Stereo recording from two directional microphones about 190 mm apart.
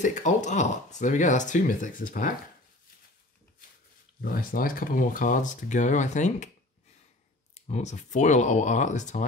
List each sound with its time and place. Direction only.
0.0 s speech: 40° left (ahead or behind)
4.2 s speech: 45° left (ahead or behind)
7.5 s speech: 35° left (ahead or behind)